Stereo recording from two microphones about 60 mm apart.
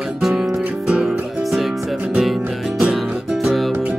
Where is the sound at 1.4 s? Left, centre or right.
Centre.